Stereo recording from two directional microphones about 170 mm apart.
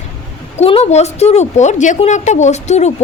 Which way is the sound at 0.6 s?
35° left (ahead or behind).